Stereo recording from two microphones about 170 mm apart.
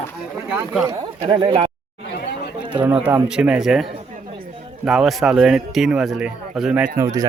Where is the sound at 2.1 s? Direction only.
70° left (ahead or behind).